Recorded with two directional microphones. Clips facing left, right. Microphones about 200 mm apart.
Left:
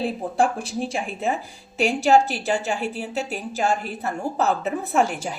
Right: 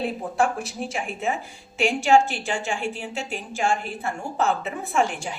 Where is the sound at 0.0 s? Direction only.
30° left (ahead or behind).